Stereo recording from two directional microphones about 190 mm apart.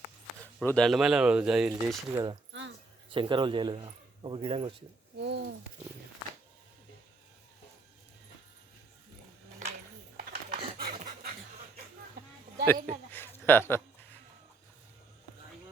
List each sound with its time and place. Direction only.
0.6 s speech: 5° left (ahead or behind)
2.1 s a man's voice: 25° right (ahead or behind)
2.5 s a sound: 75° right (ahead or behind)
3.1 s a man's voice: 25° right (ahead or behind)
5.2 s a sound: 65° right (ahead or behind)
10.2 s dog: 50° right (ahead or behind)
12.7 s speech: 50° right (ahead or behind)
13.1 s speech: 10° left (ahead or behind)